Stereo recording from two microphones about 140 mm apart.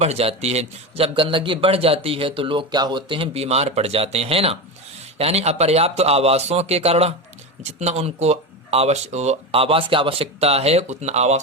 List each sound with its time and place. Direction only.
0.0 s a man's voice: 50° right (ahead or behind)